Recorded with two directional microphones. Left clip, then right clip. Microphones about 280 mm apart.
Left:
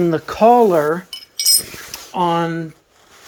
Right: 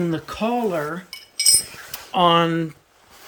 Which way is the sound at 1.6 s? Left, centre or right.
Left.